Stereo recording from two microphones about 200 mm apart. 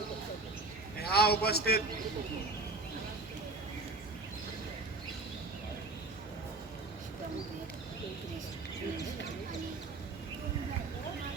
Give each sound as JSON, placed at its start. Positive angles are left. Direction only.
{"t": 1.0, "sound": "a man's voice", "side_deg": 50}